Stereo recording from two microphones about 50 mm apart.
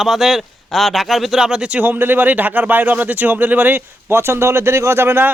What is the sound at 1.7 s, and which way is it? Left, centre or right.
Speech, right.